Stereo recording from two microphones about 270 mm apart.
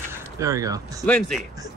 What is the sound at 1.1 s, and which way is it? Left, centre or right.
Speech, centre.